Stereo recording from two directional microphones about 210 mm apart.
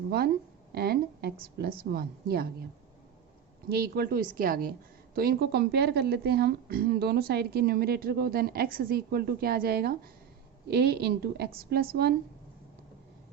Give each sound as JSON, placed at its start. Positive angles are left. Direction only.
{"t": 0.7, "sound": "a woman's voice", "side_deg": -50}
{"t": 3.7, "sound": "a woman's voice", "side_deg": -45}